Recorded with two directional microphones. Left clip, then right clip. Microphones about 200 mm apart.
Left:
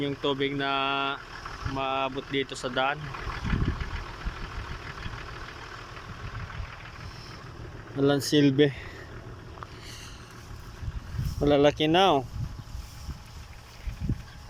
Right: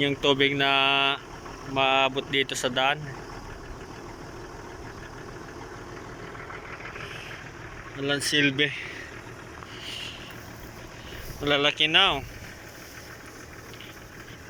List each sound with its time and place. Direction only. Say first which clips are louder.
0.0 s speech: right 6 dB; centre (ahead or behind)
7.9 s speech: left 1 dB; 25° left (ahead or behind)
9.8 s a sound: right 8 dB; 25° left (ahead or behind)
11.4 s speech: left 1 dB; 25° left (ahead or behind)